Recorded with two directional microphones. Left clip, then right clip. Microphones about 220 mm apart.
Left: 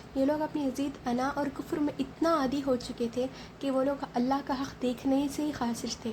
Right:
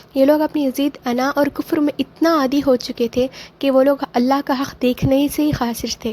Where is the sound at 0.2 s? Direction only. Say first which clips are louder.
Right 14 dB; 40° right (ahead or behind).